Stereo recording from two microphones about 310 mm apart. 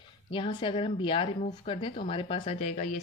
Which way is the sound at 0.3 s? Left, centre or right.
Centre.